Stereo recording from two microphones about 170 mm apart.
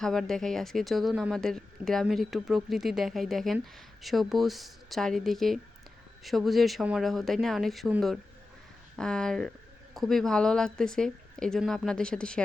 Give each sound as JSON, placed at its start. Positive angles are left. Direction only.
{"t": 0.0, "sound": "speech", "side_deg": 0}